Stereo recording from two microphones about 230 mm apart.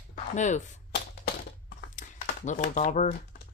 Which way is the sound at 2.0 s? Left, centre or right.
Left.